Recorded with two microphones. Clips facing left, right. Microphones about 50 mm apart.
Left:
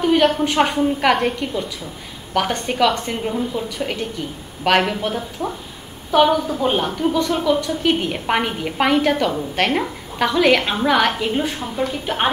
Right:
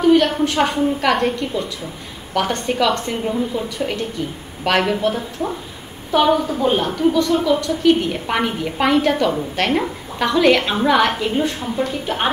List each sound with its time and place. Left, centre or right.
0.1 s a woman's voice: centre